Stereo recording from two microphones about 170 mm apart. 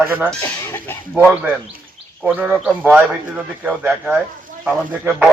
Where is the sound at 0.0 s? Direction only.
15° right (ahead or behind).